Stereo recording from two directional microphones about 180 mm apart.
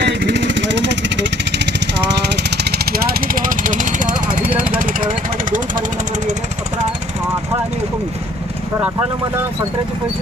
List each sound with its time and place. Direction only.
0.0 s vehicle: 70° right (ahead or behind)
2.3 s vehicle: 65° right (ahead or behind)